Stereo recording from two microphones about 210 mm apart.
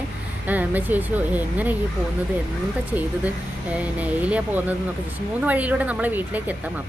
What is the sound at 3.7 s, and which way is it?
Speech, 5° right (ahead or behind).